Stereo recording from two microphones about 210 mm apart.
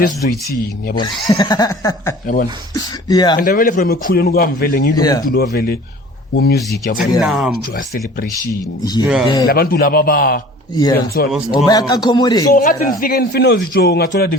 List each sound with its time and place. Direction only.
0.9 s speech: 20° left (ahead or behind)
2.2 s speech: 40° left (ahead or behind)
2.7 s speech: 20° left (ahead or behind)
3.3 s a man's voice: 40° left (ahead or behind)
4.9 s speech: 20° left (ahead or behind)
5.3 s a man's voice: 50° left (ahead or behind)
7.2 s speech: 5° right (ahead or behind)
7.8 s a man's voice: 40° left (ahead or behind)
8.8 s a man's voice: 20° left (ahead or behind)
9.5 s a man's voice: 45° left (ahead or behind)
10.8 s a man's voice: 20° left (ahead or behind)
12.5 s a man's voice: 40° left (ahead or behind)